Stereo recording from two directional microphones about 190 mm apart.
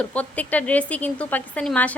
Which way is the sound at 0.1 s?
10° left (ahead or behind).